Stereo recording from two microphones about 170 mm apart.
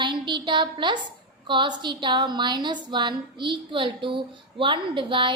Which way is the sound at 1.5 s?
25° right (ahead or behind).